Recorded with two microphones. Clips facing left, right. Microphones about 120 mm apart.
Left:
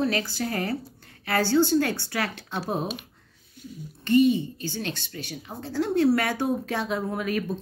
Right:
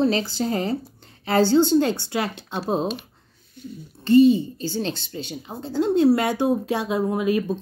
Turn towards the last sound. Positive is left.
turn(degrees=-20)  # may be behind; listen again after turning